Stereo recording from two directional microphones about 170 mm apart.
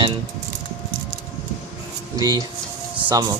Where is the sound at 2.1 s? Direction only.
25° right (ahead or behind).